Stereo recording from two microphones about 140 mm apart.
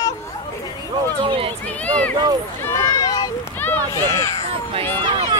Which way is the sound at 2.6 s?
25° left (ahead or behind).